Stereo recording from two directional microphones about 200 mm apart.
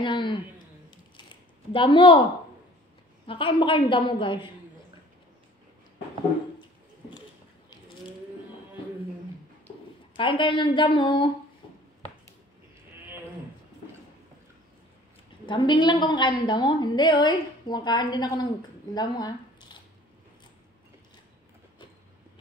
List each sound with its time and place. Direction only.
0.0 s a woman's voice: 25° left (ahead or behind)
0.8 s a sound: 25° left (ahead or behind)
3.3 s a woman's voice: 25° left (ahead or behind)
10.1 s a woman's voice: 25° left (ahead or behind)
15.4 s a woman's voice: 25° left (ahead or behind)
18.9 s a sound: 20° left (ahead or behind)